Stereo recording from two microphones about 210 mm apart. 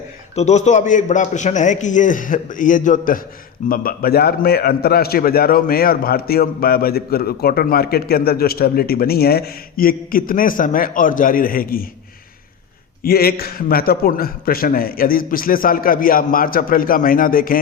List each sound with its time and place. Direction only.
0.3 s a man's voice: 35° left (ahead or behind)
13.0 s a man's voice: 45° left (ahead or behind)